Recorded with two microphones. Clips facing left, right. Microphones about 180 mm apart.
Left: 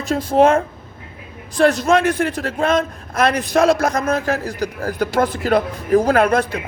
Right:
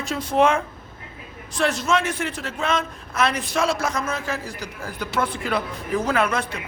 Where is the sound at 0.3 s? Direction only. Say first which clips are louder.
Left 5 dB; 45° left (ahead or behind).